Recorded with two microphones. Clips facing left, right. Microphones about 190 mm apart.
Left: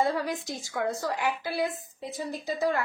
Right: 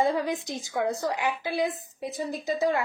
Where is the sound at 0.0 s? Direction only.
20° right (ahead or behind).